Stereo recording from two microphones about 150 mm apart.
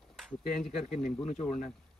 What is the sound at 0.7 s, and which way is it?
Speech, 55° left (ahead or behind).